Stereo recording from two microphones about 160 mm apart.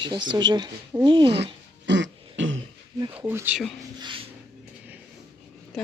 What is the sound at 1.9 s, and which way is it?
Throat clearing, 90° right.